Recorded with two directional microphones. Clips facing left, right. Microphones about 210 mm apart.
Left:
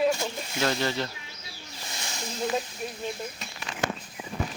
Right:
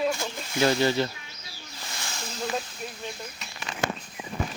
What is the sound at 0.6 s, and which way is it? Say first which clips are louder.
Speech: right 5 dB; 5° right (ahead or behind).